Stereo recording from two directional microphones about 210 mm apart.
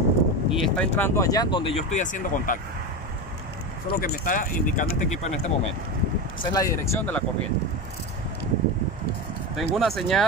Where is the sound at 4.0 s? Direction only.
40° left (ahead or behind).